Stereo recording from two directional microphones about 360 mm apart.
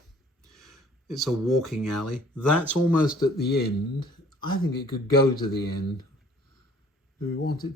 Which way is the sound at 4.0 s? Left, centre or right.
Centre.